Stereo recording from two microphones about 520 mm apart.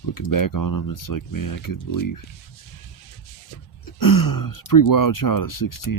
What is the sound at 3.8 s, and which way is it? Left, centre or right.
Speech, left.